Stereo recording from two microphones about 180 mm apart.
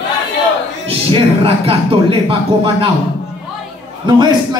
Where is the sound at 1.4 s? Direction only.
30° right (ahead or behind).